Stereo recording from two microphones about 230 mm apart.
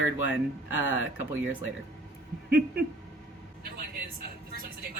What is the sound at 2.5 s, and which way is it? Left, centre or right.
Owl, right.